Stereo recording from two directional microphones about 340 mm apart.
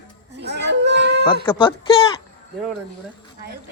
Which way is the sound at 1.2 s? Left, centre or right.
Centre.